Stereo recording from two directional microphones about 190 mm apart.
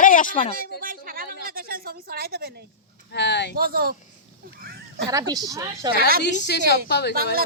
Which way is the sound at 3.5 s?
50° right (ahead or behind).